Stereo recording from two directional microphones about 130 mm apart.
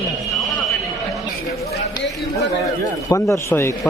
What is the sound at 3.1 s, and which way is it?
Speech, 25° left (ahead or behind).